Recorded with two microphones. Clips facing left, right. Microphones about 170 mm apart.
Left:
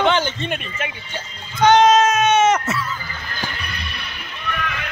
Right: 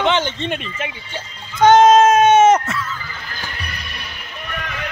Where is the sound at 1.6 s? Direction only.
50° right (ahead or behind).